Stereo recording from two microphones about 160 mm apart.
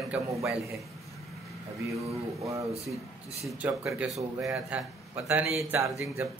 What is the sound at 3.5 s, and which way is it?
A man's voice, 5° right (ahead or behind).